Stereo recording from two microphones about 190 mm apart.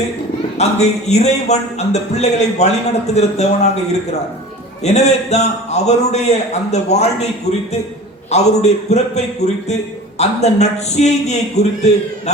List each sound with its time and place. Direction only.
0.6 s speech: 35° left (ahead or behind)
4.8 s speech: 35° left (ahead or behind)
8.3 s speech: 35° left (ahead or behind)